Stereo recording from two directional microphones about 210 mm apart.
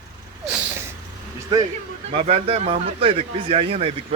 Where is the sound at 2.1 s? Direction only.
30° right (ahead or behind).